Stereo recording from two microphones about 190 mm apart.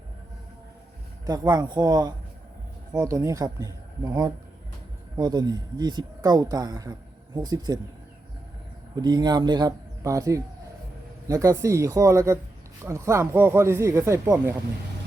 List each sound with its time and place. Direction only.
1.3 s speech: 20° right (ahead or behind)
9.0 s speech: 20° right (ahead or behind)